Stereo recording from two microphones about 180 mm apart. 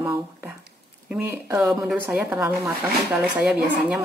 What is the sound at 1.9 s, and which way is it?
Speech, 5° right (ahead or behind).